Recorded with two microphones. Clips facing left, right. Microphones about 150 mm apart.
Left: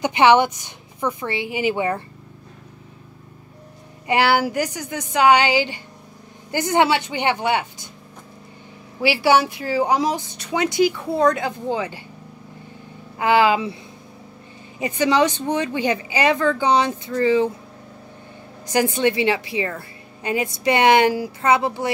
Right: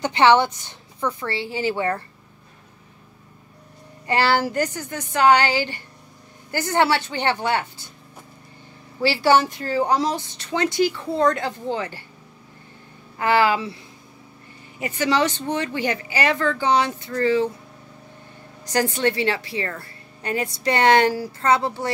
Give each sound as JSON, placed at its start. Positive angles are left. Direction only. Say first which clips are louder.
{"t": 0.0, "sound": "a woman's voice", "louder": "left 1 dB", "side_deg": 15}
{"t": 4.1, "sound": "a woman's voice", "louder": "left 2 dB", "side_deg": 15}
{"t": 9.0, "sound": "a woman's voice", "louder": "left 1 dB", "side_deg": 10}
{"t": 13.2, "sound": "a woman's voice", "louder": "left 2 dB", "side_deg": 15}
{"t": 14.8, "sound": "a woman's voice", "louder": "left 3 dB", "side_deg": 15}
{"t": 18.7, "sound": "a woman's voice", "louder": "left 2 dB", "side_deg": 15}